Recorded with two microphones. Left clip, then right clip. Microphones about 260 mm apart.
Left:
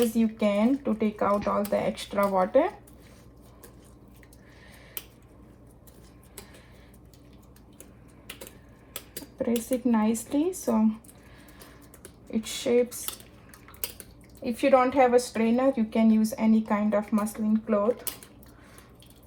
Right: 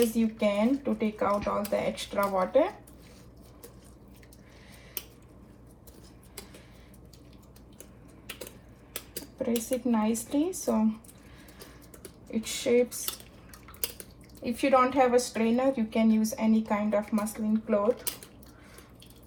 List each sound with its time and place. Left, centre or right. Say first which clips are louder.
0.1 s speech: left 2 dB; left
9.1 s speech: left 2 dB; left
12.3 s speech: left 1 dB; left
14.4 s speech: left 2 dB; left